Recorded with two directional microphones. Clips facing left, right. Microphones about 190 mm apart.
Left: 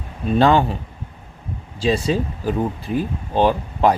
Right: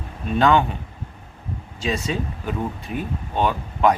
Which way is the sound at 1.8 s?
30° left (ahead or behind).